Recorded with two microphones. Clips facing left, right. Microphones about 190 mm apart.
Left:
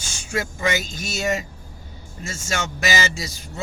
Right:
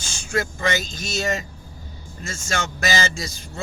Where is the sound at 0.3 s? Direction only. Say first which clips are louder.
Right 1 dB; 10° left (ahead or behind).